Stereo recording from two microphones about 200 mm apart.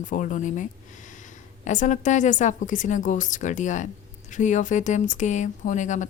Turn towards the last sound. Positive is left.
turn(degrees=40)  # may be behind; listen again after turning